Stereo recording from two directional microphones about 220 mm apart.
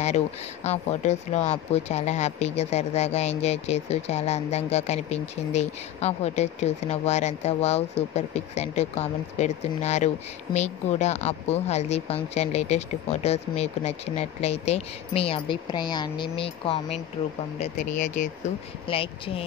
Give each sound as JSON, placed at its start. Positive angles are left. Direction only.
{"t": 0.7, "sound": "speech", "side_deg": 30}
{"t": 17.6, "sound": "speech", "side_deg": 35}
{"t": 18.9, "sound": "speech", "side_deg": 25}